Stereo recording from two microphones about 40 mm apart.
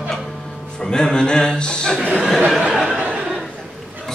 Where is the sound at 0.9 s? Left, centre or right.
Centre.